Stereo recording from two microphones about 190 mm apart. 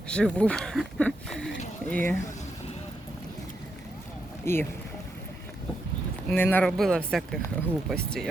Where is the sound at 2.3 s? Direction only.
40° left (ahead or behind).